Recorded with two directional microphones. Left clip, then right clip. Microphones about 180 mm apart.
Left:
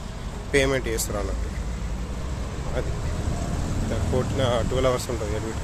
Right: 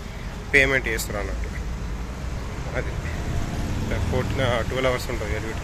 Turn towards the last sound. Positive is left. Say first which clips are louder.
# even
turn(degrees=25)  # may be behind; listen again after turning